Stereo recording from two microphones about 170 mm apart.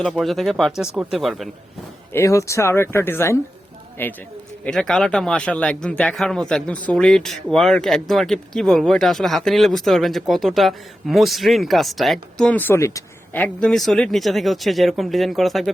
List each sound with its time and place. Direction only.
0.0 s a man's voice: centre (ahead or behind)
2.1 s a man's voice: 15° left (ahead or behind); by 15.7 s centre (ahead or behind)